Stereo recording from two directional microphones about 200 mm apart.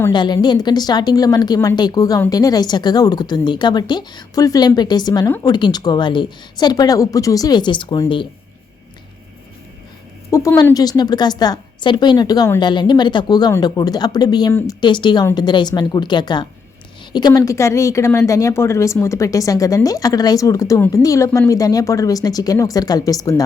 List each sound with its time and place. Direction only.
0.1 s a woman's voice: 20° left (ahead or behind)
10.3 s a woman's voice: 15° left (ahead or behind)